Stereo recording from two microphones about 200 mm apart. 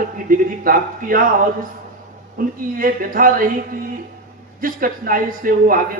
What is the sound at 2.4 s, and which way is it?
Speech, 45° right (ahead or behind).